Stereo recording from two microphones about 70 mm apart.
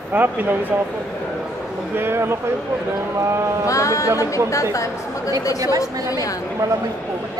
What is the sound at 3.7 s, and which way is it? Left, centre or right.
A woman's voice, left.